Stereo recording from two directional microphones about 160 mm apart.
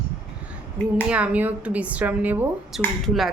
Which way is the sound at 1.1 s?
10° right (ahead or behind).